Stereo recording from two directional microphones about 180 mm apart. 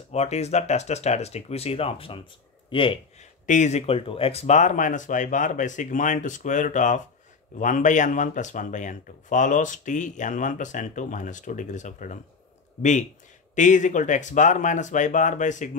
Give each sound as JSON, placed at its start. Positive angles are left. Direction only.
{"t": 0.1, "sound": "speech", "side_deg": 35}
{"t": 3.4, "sound": "speech", "side_deg": 40}
{"t": 13.6, "sound": "speech", "side_deg": 45}